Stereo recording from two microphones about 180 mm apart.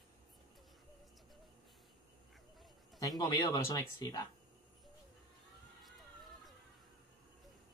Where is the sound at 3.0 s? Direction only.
20° left (ahead or behind).